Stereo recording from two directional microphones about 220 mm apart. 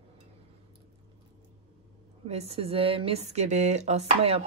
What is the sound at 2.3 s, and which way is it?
Speech, 30° right (ahead or behind).